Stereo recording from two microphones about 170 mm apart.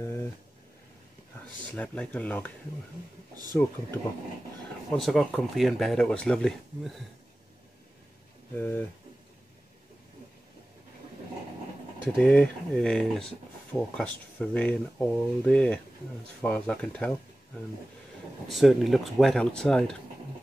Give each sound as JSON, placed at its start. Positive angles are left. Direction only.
{"t": 0.0, "sound": "a sound", "side_deg": 15}
{"t": 1.8, "sound": "speech", "side_deg": 10}
{"t": 4.9, "sound": "speech", "side_deg": 0}
{"t": 8.5, "sound": "speech", "side_deg": 10}
{"t": 12.2, "sound": "speech", "side_deg": 5}
{"t": 18.5, "sound": "speech", "side_deg": 0}